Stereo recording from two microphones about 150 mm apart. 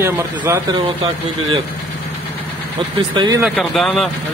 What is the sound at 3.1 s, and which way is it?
Speech, 30° right (ahead or behind).